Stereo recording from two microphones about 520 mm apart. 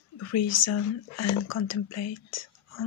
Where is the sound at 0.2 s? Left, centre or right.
Left.